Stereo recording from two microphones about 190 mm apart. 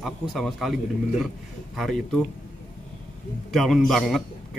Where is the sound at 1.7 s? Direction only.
Centre (ahead or behind).